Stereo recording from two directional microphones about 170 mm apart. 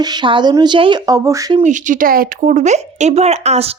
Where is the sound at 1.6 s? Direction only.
45° right (ahead or behind).